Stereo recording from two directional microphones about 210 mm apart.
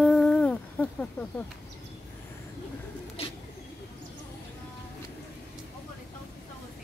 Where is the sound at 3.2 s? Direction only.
30° left (ahead or behind).